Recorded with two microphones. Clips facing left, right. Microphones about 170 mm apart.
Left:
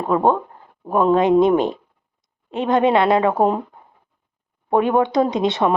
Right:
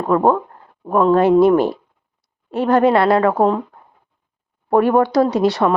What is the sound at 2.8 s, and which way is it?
Speech, 20° left (ahead or behind).